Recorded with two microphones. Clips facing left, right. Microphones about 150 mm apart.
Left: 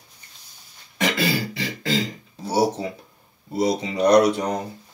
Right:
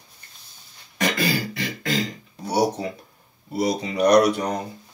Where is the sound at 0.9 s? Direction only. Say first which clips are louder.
Left 1 dB; 25° left (ahead or behind).